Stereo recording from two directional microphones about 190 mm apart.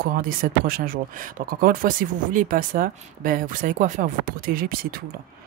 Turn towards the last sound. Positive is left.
turn(degrees=-50)  # may be behind; listen again after turning